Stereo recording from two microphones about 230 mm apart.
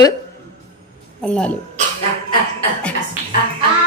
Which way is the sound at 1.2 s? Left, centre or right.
Centre.